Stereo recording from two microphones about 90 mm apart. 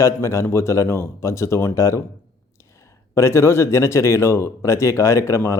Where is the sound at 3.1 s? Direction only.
30° left (ahead or behind).